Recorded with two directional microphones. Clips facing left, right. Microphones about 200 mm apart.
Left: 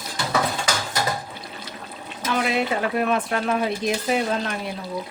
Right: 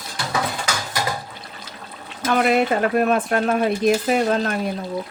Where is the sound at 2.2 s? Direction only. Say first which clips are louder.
Right 5 dB; 55° right (ahead or behind).